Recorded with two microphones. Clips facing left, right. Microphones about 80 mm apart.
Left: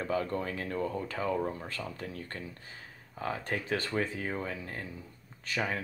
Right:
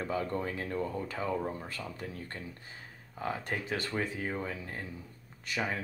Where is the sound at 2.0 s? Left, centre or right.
Centre.